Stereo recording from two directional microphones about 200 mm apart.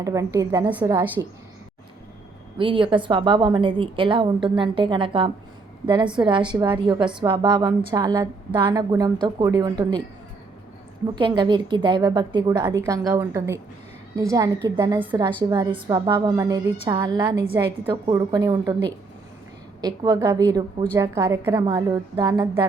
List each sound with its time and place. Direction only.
0.0 s a woman's voice: 15° right (ahead or behind)
2.6 s a woman's voice: 25° right (ahead or behind)
11.0 s a woman's voice: 20° right (ahead or behind)
14.9 s a woman's voice: 10° right (ahead or behind)
15.4 s a woman's voice: 20° right (ahead or behind)